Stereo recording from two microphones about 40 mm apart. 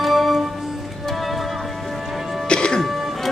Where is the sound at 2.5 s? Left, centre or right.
Left.